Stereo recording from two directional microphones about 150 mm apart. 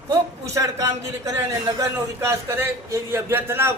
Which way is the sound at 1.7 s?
20° right (ahead or behind).